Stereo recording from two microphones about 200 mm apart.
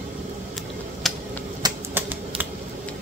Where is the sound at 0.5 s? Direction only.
Centre (ahead or behind).